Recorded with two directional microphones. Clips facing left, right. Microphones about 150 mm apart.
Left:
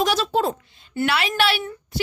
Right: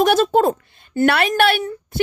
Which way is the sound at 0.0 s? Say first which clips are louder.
Right 6 dB; 50° right (ahead or behind).